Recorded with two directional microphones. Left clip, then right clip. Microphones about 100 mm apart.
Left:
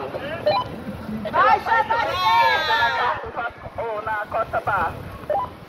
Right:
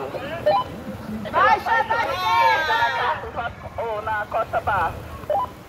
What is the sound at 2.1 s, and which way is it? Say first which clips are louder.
Speech: left 1 dB; 20° right (ahead or behind).